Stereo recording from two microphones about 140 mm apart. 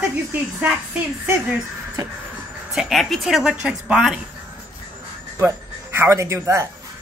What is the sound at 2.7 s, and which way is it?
Speech, centre (ahead or behind).